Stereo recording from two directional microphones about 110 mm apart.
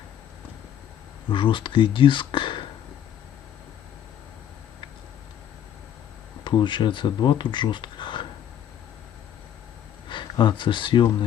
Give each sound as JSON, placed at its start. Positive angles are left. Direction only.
{"t": 1.3, "sound": "speech", "side_deg": 45}
{"t": 6.4, "sound": "speech", "side_deg": 45}
{"t": 10.1, "sound": "speech", "side_deg": 45}